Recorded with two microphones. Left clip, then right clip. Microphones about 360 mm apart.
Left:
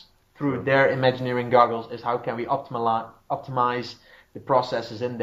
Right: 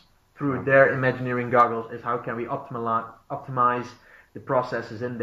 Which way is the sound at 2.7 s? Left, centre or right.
Left.